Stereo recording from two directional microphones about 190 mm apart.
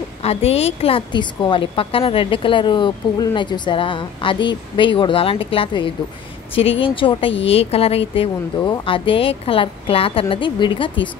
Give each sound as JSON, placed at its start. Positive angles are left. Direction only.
{"t": 0.2, "sound": "speech", "side_deg": 30}